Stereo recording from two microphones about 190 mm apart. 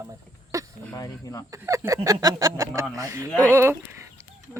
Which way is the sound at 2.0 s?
20° right (ahead or behind).